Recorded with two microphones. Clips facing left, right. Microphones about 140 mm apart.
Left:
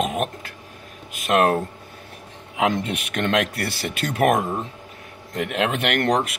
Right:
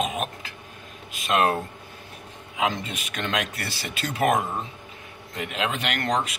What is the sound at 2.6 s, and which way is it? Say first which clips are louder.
Speech: left 5 dB; 65° left (ahead or behind).